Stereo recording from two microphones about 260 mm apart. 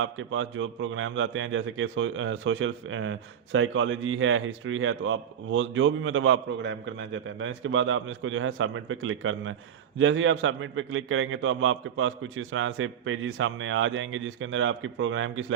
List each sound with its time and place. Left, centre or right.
0.0 s a man's voice: right